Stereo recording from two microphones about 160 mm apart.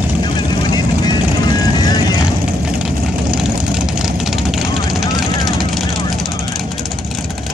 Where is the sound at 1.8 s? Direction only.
25° left (ahead or behind).